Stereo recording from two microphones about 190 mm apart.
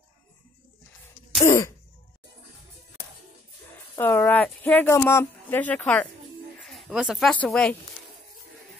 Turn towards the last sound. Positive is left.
turn(degrees=5)  # may be behind; listen again after turning